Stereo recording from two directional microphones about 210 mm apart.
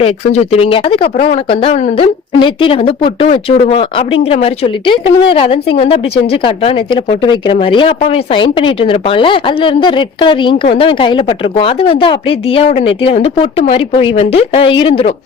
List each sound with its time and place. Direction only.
0.0 s speech: 30° left (ahead or behind)